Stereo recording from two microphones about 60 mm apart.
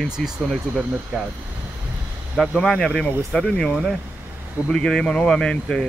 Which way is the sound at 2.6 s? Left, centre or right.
Centre.